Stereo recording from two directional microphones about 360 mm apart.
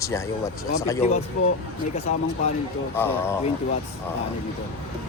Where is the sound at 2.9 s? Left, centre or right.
Centre.